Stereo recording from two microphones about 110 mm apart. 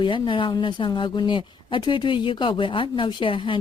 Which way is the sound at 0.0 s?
50° left (ahead or behind).